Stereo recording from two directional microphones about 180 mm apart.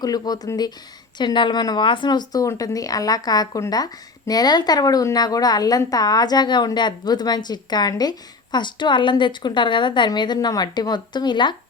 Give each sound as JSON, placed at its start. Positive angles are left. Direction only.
{"t": 0.0, "sound": "a woman's voice", "side_deg": 20}